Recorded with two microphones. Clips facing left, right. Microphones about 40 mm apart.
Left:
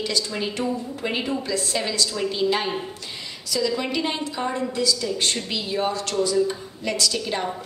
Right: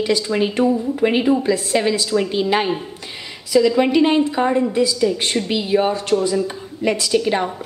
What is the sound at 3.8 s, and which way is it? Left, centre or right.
A woman's voice, right.